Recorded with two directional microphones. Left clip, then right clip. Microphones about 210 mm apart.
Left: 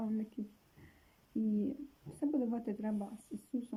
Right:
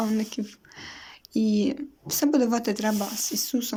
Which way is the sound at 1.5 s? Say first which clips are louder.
Right 13 dB; 40° right (ahead or behind).